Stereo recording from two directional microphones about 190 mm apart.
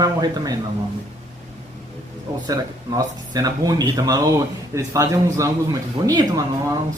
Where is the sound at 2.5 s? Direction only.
20° right (ahead or behind).